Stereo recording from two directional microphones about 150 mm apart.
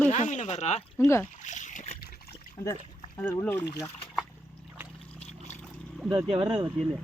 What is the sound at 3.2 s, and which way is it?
Speech, 10° left (ahead or behind).